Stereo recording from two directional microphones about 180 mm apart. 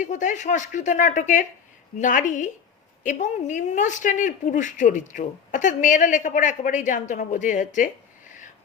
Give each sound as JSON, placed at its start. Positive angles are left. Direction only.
{"t": 0.0, "sound": "a woman's voice", "side_deg": 45}